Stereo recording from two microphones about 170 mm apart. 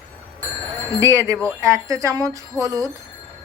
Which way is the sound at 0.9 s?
15° right (ahead or behind).